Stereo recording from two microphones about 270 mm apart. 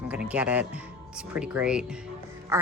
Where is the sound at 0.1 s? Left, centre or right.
Centre.